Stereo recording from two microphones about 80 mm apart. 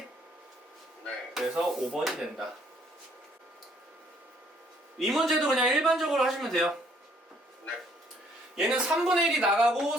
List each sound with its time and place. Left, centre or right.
1.3 s a man's voice: centre
4.9 s a man's voice: centre
8.5 s speech: centre